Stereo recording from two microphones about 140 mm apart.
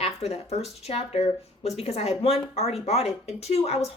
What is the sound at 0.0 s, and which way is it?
Speech, 45° left (ahead or behind).